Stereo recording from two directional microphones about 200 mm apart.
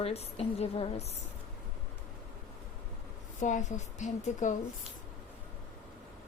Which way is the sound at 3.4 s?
35° left (ahead or behind).